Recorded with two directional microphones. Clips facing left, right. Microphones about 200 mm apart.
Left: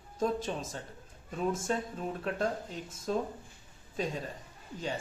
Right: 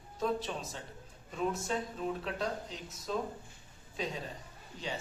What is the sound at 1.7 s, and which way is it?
Speech, 45° left (ahead or behind).